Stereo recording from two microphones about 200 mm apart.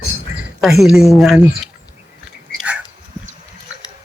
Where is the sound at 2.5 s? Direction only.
5° right (ahead or behind).